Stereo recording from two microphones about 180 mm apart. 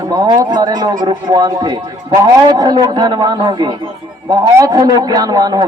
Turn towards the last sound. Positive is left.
turn(degrees=-20)  # may be behind; listen again after turning